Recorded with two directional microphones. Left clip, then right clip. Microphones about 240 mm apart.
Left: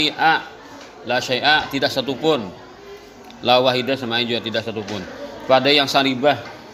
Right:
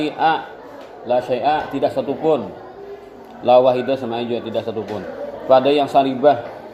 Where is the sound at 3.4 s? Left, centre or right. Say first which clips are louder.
Right 3 dB; left.